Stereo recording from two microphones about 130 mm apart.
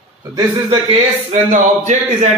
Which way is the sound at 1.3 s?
65° right (ahead or behind).